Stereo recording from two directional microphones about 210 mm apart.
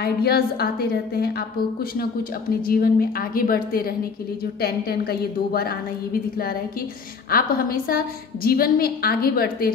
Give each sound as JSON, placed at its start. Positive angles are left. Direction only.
{"t": 0.0, "sound": "a woman's voice", "side_deg": 45}
{"t": 2.6, "sound": "a woman's voice", "side_deg": 45}
{"t": 7.2, "sound": "a woman's voice", "side_deg": 45}